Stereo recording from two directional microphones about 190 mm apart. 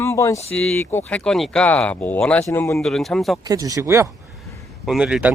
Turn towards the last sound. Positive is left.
turn(degrees=-5)  # may be behind; listen again after turning